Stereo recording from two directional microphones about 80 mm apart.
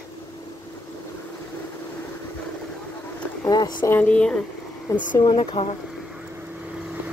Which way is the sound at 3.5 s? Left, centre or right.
Left.